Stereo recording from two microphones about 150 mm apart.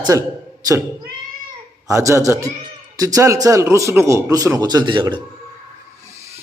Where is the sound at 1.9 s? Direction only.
20° right (ahead or behind).